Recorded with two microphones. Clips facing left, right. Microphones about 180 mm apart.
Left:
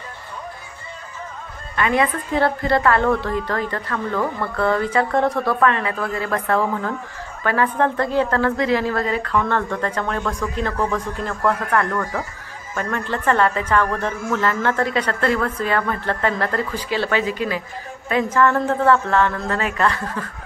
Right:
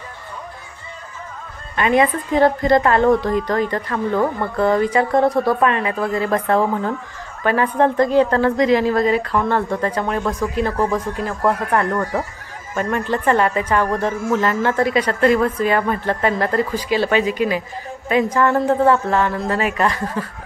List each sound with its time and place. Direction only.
1.8 s a woman's voice: 20° right (ahead or behind)
11.7 s speech: 25° right (ahead or behind)
12.7 s a woman's voice: 15° right (ahead or behind)